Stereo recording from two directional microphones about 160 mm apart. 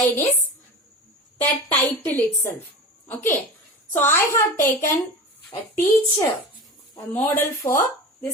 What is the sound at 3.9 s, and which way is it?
Speech, 15° left (ahead or behind).